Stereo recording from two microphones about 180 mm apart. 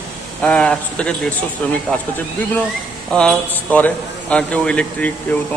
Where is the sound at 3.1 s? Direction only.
5° left (ahead or behind).